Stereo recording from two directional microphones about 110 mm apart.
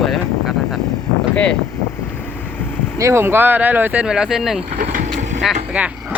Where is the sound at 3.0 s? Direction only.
25° right (ahead or behind).